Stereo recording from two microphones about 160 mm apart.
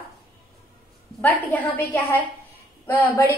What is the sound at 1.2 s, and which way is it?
A woman's voice, 10° left (ahead or behind).